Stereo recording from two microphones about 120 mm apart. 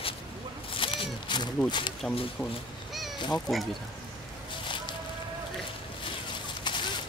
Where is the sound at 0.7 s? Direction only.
45° left (ahead or behind).